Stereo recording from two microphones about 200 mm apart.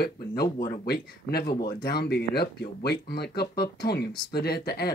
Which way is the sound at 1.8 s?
50° left (ahead or behind).